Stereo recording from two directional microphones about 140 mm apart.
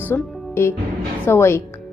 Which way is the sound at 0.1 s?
15° left (ahead or behind).